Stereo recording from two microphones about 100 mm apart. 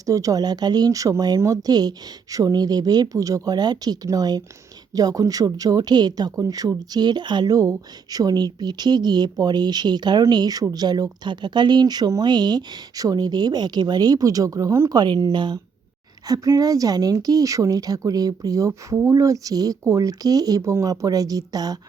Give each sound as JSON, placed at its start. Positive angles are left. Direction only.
{"t": 0.0, "sound": "speech", "side_deg": -35}
{"t": 14.9, "sound": "speech", "side_deg": -45}
{"t": 16.2, "sound": "speech", "side_deg": -35}